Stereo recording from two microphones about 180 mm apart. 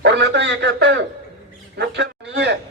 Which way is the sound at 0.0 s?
75° right (ahead or behind).